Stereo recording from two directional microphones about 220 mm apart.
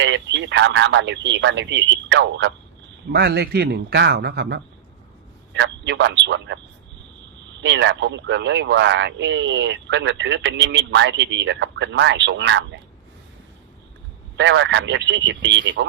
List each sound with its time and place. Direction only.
0.0 s a man's voice: 55° right (ahead or behind)
7.6 s speech: 55° right (ahead or behind)
14.3 s speech: 55° right (ahead or behind)